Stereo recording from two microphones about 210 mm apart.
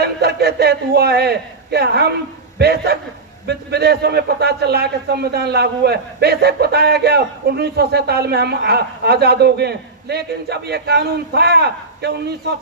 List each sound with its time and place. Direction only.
0.0 s a man's voice: 50° right (ahead or behind)